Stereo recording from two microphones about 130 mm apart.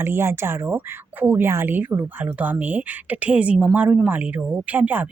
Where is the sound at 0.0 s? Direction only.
20° right (ahead or behind).